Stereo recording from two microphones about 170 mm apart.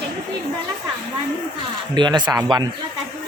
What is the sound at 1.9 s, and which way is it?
Speech, 25° right (ahead or behind).